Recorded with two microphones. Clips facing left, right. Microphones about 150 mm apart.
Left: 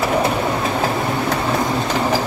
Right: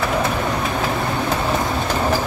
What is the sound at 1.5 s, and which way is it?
Train, 5° right (ahead or behind).